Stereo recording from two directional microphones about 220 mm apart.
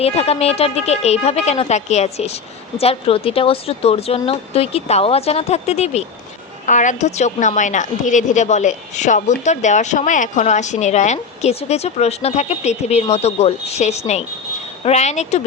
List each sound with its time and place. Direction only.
0.0 s a woman's voice: 30° left (ahead or behind)